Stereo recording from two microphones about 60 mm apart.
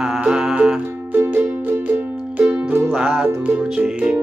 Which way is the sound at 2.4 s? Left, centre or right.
Right.